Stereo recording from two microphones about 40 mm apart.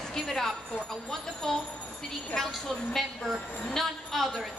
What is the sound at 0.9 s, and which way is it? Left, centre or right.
A woman's voice, centre.